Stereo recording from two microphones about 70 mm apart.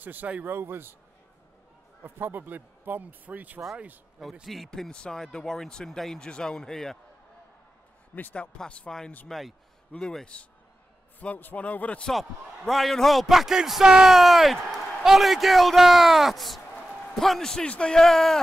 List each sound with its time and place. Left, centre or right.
0.0 s a man's voice: right
2.0 s a man's voice: right
4.2 s speech: centre
8.1 s a man's voice: left
8.4 s speech: centre
11.1 s a man's voice: left
12.1 s a man's voice: centre